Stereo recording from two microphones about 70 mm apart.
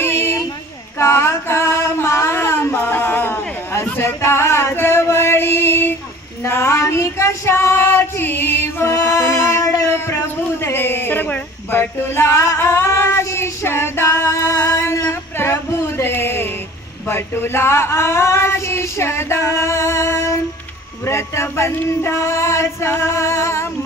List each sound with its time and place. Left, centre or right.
0.0 s vehicle: left
0.9 s female singing: left
2.3 s music: left
2.8 s a sound: left
4.7 s female singing: left
6.4 s female singing: left
9.1 s music: left
9.8 s music: left
10.6 s male singing: left
17.1 s female singing: left
21.8 s music: left